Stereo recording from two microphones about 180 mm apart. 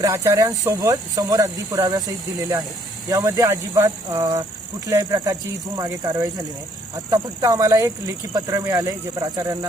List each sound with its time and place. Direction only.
0.0 s speech: 15° right (ahead or behind)
3.1 s speech: 20° right (ahead or behind)